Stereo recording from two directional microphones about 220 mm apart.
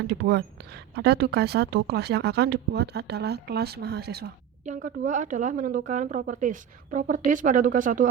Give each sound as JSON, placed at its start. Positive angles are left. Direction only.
{"t": 0.3, "sound": "a woman's voice", "side_deg": -50}
{"t": 4.6, "sound": "speech", "side_deg": -35}